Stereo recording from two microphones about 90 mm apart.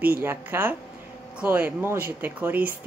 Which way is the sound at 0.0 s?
25° right (ahead or behind).